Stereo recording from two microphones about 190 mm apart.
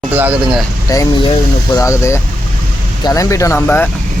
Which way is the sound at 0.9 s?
20° left (ahead or behind).